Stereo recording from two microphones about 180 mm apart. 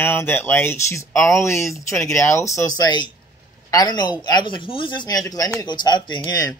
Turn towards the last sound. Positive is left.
turn(degrees=20)  # may be behind; listen again after turning